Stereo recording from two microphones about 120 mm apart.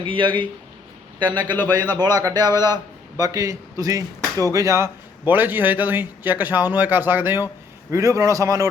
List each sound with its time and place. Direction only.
0.0 s a man's voice: 45° right (ahead or behind); by 4.9 s 25° right (ahead or behind)
5.2 s speech: 15° right (ahead or behind)